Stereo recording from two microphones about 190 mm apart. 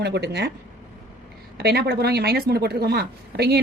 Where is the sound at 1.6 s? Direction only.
55° right (ahead or behind).